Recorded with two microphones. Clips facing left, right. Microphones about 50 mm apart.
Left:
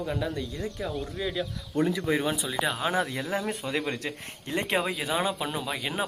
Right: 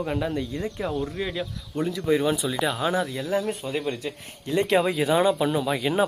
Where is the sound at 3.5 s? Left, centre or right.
Left.